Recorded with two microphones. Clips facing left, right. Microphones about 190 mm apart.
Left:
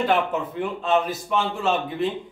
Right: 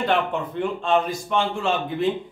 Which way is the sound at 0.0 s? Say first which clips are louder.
Left 1 dB; 5° left (ahead or behind).